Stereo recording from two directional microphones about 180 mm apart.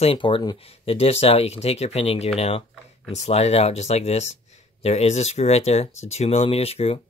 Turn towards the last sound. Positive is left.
turn(degrees=35)  # may be behind; listen again after turning